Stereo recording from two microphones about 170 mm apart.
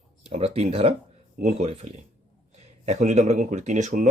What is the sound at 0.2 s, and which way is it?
Speech, 40° right (ahead or behind).